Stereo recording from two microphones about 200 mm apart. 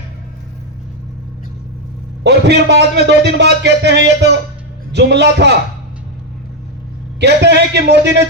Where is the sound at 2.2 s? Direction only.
55° right (ahead or behind).